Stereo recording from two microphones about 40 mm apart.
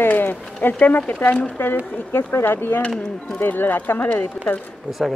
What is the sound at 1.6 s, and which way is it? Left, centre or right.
Speech, left.